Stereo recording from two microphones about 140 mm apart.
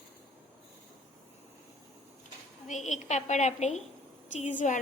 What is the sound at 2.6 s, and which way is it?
A woman's voice, 60° left (ahead or behind).